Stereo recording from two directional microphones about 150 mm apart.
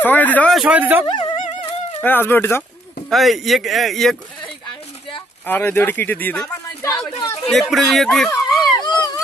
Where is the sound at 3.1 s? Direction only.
Centre (ahead or behind).